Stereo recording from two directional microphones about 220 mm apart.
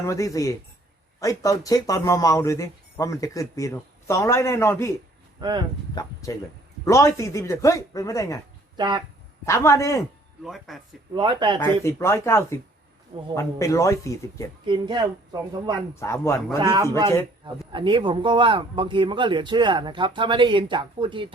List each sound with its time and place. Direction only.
0.0 s speech: 15° left (ahead or behind)
5.4 s speech: 20° right (ahead or behind)
5.9 s speech: 15° left (ahead or behind)
8.7 s speech: 20° right (ahead or behind)
9.5 s speech: 15° left (ahead or behind)
10.4 s speech: centre (ahead or behind)
11.1 s a man's voice: 20° right (ahead or behind)
11.6 s speech: 15° left (ahead or behind)
14.6 s a man's voice: 20° right (ahead or behind)
16.0 s speech: 10° left (ahead or behind)
16.6 s a man's voice: 15° right (ahead or behind)